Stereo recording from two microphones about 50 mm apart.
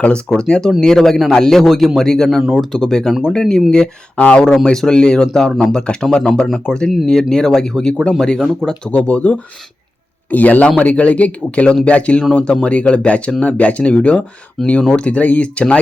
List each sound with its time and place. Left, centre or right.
0.3 s speech: centre
2.4 s speech: centre
2.7 s speech: centre
4.2 s speech: left
4.6 s speech: centre
5.7 s speech: centre
8.9 s speech: left